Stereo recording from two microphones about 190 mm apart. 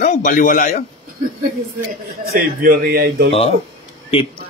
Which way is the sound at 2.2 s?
50° right (ahead or behind).